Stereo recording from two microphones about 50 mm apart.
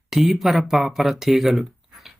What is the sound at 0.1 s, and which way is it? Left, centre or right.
Speech, centre.